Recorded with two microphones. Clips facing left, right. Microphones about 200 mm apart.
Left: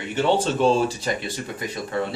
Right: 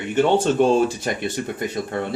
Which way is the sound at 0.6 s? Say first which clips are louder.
Right 2 dB; 55° right (ahead or behind).